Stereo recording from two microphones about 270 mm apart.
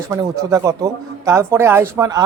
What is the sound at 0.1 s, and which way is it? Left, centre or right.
Speech, centre.